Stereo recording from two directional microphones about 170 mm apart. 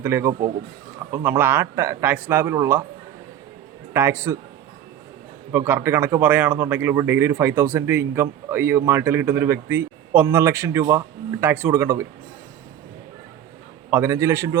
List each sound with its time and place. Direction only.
0.0 s speech: 15° right (ahead or behind)
3.9 s speech: 15° right (ahead or behind)
5.5 s speech: 10° right (ahead or behind)
13.9 s speech: 15° right (ahead or behind)